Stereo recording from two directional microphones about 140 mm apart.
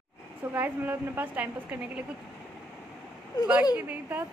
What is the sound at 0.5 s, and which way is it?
Speech, 15° right (ahead or behind).